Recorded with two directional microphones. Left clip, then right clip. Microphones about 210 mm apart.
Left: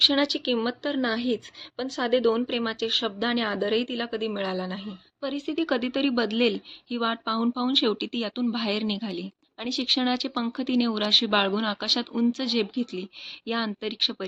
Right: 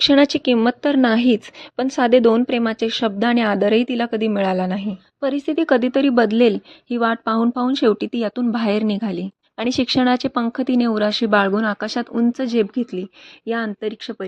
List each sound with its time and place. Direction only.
0.0 s speech: 45° right (ahead or behind); by 13.1 s 30° right (ahead or behind)
13.4 s speech: 15° right (ahead or behind)